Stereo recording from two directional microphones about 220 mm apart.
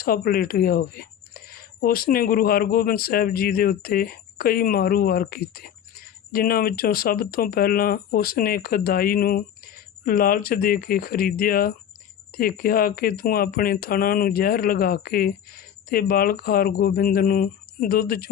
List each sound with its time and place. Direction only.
0.0 s speech: 40° left (ahead or behind)